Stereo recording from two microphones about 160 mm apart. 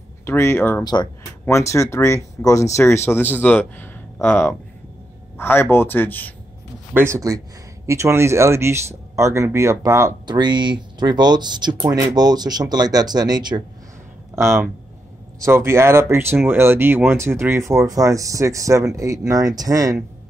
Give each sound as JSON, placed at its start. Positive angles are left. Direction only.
{"t": 0.2, "sound": "speech", "side_deg": 15}
{"t": 6.9, "sound": "speech", "side_deg": -15}